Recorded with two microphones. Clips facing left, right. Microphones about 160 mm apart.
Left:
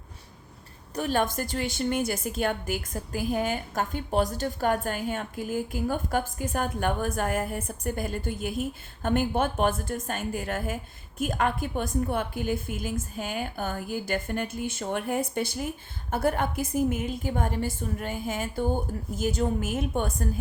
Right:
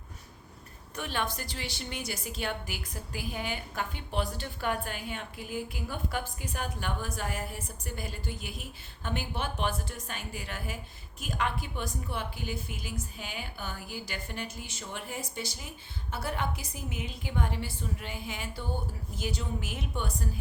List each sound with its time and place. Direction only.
0.9 s a woman's voice: 40° left (ahead or behind)